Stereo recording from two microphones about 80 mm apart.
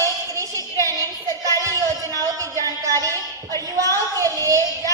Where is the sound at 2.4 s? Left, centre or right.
Right.